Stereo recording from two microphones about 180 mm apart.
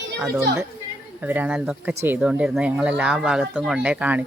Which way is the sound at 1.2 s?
10° right (ahead or behind).